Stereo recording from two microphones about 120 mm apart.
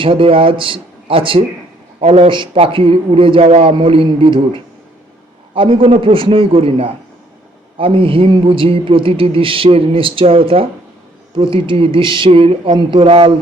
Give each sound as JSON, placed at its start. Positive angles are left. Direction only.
{"t": 0.0, "sound": "a man's voice", "side_deg": -50}
{"t": 3.8, "sound": "a man's voice", "side_deg": -45}
{"t": 12.7, "sound": "a man's voice", "side_deg": -40}